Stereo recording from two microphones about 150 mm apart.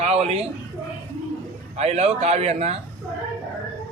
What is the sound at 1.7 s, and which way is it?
A man's voice, 45° right (ahead or behind).